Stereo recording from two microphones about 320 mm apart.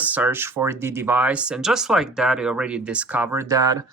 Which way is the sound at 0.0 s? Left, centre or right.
Centre.